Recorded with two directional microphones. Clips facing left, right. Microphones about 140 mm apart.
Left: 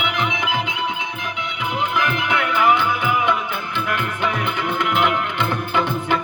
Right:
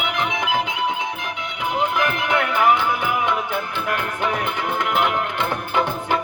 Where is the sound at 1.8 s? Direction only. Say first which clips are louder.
Right 1 dB; 40° right (ahead or behind).